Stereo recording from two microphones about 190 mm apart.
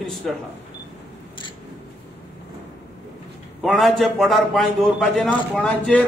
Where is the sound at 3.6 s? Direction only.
Centre (ahead or behind).